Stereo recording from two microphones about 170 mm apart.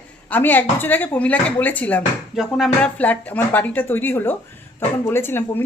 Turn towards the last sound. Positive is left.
turn(degrees=15)  # may be behind; listen again after turning